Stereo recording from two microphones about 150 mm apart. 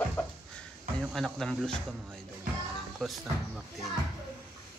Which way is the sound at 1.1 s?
Centre (ahead or behind).